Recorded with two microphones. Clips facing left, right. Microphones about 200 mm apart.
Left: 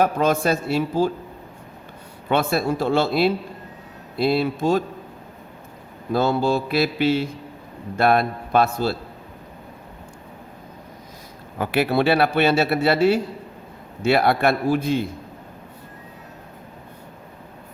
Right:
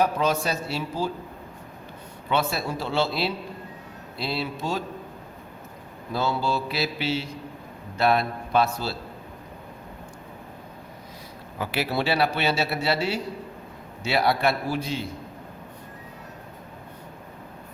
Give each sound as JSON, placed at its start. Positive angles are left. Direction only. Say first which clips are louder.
{"t": 0.0, "sound": "a man's voice", "louder": "left 4 dB", "side_deg": 50}
{"t": 2.3, "sound": "a man's voice", "louder": "left 5 dB", "side_deg": 50}
{"t": 6.1, "sound": "a man's voice", "louder": "left 6 dB", "side_deg": 50}
{"t": 11.5, "sound": "a man's voice", "louder": "left 7 dB", "side_deg": 55}